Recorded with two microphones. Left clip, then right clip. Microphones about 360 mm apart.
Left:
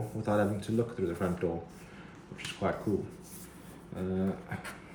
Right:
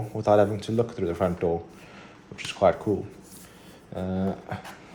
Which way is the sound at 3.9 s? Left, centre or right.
Centre.